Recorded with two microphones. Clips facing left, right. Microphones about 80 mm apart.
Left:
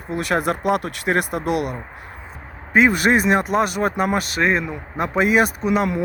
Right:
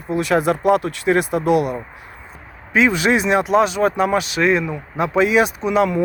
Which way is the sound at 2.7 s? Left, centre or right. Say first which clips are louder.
Even; left.